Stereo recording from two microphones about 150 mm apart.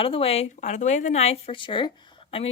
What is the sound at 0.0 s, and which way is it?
Speech, 40° left (ahead or behind).